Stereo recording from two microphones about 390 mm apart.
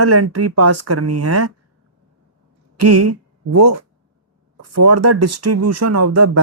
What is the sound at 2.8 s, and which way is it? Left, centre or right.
Speech, right.